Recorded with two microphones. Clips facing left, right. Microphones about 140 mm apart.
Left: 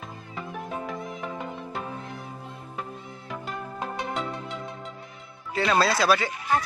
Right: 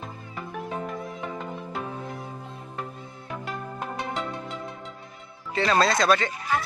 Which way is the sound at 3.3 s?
Centre (ahead or behind).